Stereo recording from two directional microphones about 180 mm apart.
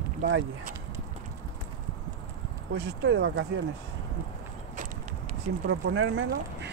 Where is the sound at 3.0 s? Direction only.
90° right.